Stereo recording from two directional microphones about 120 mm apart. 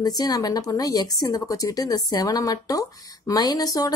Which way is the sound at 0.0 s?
30° left (ahead or behind).